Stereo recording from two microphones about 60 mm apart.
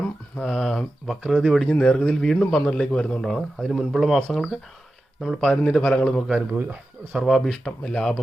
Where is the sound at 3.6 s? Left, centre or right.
Centre.